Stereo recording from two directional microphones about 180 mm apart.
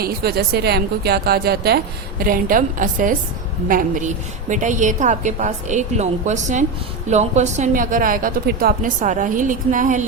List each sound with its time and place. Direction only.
0.0 s a woman's voice: 60° right (ahead or behind)